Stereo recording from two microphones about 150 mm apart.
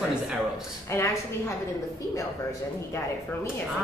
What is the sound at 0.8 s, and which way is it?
Speech, 20° left (ahead or behind).